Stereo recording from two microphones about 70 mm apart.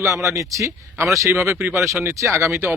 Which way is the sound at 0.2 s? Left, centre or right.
Right.